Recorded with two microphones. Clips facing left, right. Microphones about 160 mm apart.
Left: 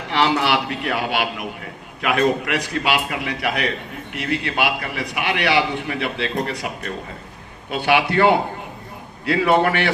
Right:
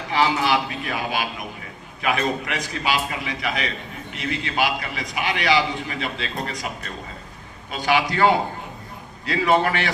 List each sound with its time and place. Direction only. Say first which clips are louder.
0.1 s a man's voice: left 1 dB; 65° left (ahead or behind)